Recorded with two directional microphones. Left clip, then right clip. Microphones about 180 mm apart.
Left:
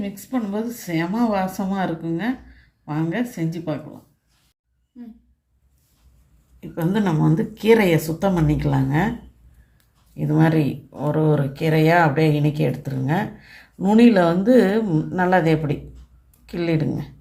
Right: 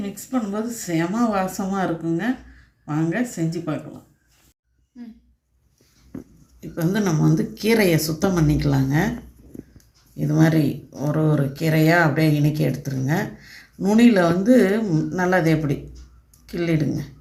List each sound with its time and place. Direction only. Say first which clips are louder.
0.3 s speech: even; 15° left (ahead or behind)
6.6 s speech: even; 20° left (ahead or behind)
10.2 s speech: even; 25° left (ahead or behind)